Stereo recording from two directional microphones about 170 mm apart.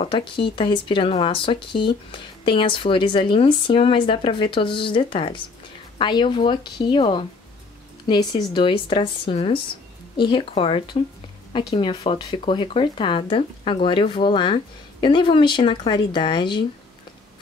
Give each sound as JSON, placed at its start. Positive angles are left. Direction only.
{"t": 0.0, "sound": "a woman's voice", "side_deg": 30}